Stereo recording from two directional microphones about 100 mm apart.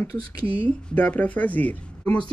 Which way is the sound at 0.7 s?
10° left (ahead or behind).